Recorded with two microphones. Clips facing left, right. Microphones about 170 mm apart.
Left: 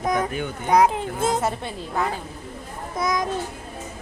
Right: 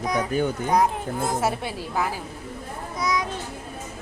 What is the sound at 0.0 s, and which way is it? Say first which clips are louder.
Children playing: left 2 dB; 50° left (ahead or behind).